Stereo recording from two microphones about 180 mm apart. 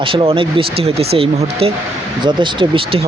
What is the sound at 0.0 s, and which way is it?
Speech, 30° right (ahead or behind).